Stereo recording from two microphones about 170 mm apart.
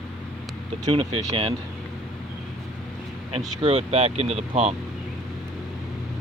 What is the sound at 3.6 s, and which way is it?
Speech, 35° right (ahead or behind).